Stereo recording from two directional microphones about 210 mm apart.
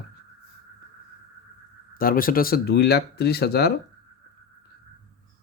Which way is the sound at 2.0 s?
45° left (ahead or behind).